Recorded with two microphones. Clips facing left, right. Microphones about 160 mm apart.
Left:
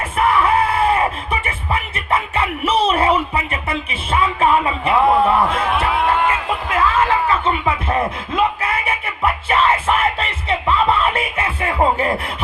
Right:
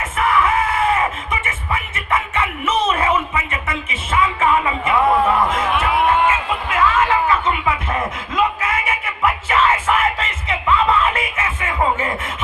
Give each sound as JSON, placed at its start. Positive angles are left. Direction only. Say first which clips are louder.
{"t": 0.2, "sound": "music", "louder": "left 2 dB", "side_deg": 30}